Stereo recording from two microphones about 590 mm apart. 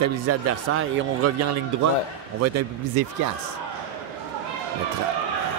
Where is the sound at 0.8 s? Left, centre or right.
Right.